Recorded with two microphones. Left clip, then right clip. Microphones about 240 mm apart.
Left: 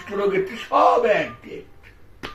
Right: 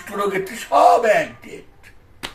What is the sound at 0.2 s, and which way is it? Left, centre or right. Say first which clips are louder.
Speech: even; centre.